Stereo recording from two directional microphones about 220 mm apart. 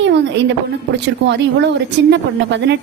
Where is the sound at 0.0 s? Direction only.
55° right (ahead or behind).